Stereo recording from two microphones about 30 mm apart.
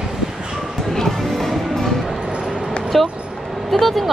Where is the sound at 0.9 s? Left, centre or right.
Centre.